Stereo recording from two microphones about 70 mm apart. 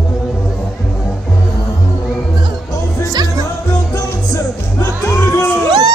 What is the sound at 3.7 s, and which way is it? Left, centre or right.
Music, left.